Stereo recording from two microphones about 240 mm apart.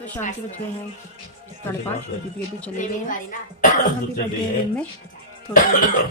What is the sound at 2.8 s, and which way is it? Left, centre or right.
Speech, left.